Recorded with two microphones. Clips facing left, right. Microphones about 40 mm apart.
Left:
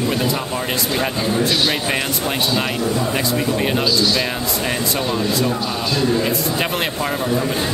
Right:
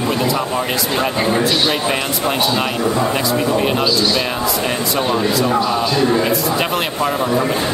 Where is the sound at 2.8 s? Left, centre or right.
Right.